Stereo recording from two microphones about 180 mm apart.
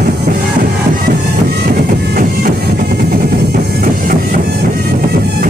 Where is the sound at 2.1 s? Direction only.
55° right (ahead or behind).